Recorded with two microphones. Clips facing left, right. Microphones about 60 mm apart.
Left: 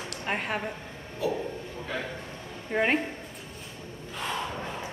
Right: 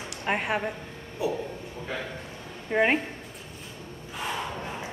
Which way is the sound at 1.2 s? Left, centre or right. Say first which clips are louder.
Right 1 dB; centre.